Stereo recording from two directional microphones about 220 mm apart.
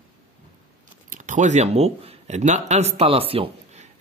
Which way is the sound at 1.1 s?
35° right (ahead or behind).